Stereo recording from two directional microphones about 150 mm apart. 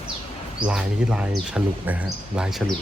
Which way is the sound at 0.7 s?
5° right (ahead or behind).